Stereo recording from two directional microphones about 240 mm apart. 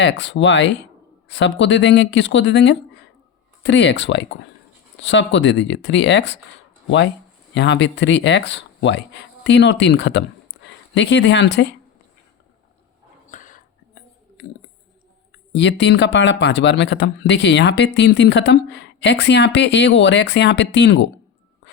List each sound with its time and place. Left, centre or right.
0.0 s speech: left
7.5 s speech: left
13.3 s whispering: left
15.5 s speech: left